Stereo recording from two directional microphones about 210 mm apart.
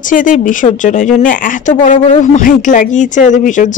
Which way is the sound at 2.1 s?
40° left (ahead or behind).